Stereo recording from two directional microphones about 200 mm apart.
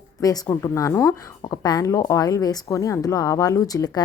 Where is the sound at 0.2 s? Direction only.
15° left (ahead or behind).